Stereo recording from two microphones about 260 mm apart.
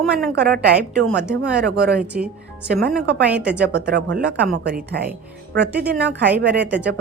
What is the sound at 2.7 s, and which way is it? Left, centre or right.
Speech, right.